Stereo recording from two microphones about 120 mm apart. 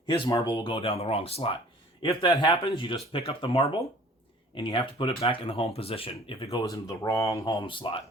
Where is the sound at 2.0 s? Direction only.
40° left (ahead or behind).